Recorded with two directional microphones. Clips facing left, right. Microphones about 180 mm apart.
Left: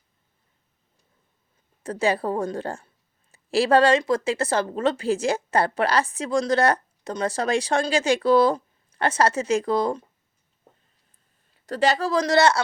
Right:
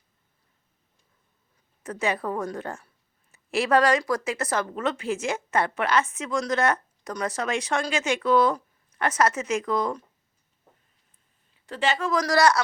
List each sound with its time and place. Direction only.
1.8 s speech: 30° left (ahead or behind)
11.5 s speech: 40° left (ahead or behind)